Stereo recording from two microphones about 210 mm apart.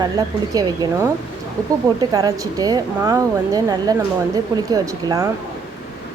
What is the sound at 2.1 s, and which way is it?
Speech, 15° right (ahead or behind).